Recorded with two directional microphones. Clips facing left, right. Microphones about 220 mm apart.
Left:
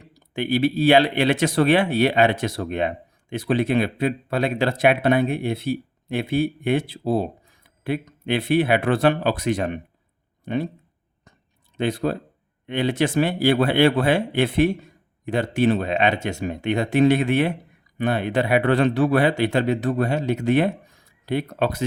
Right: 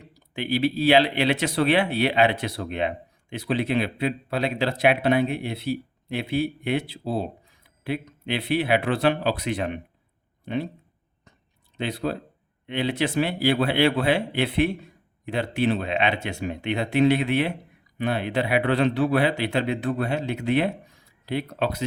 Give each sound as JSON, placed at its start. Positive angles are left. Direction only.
{"t": 0.3, "sound": "speech", "side_deg": 50}
{"t": 11.8, "sound": "speech", "side_deg": 50}